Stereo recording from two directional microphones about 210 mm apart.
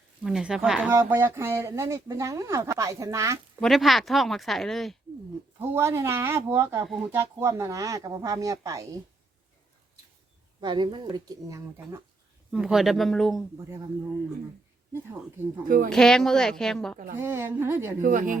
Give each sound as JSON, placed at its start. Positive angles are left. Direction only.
{"t": 0.2, "sound": "speech", "side_deg": -5}
{"t": 3.6, "sound": "speech", "side_deg": 0}
{"t": 5.5, "sound": "speech", "side_deg": -10}
{"t": 10.6, "sound": "speech", "side_deg": -20}
{"t": 12.5, "sound": "speech", "side_deg": -5}
{"t": 15.6, "sound": "speech", "side_deg": -40}
{"t": 15.9, "sound": "speech", "side_deg": 5}
{"t": 17.2, "sound": "speech", "side_deg": -10}
{"t": 18.0, "sound": "speech", "side_deg": -40}